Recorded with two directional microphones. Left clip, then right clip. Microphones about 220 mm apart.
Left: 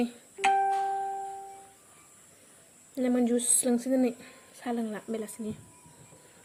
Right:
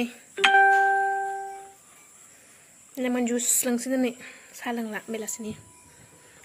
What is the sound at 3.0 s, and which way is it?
A woman's voice, 15° left (ahead or behind).